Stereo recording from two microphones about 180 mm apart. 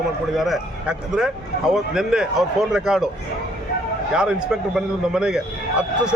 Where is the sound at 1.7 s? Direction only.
5° right (ahead or behind).